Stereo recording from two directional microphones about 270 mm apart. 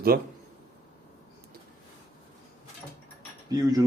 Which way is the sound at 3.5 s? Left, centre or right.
Centre.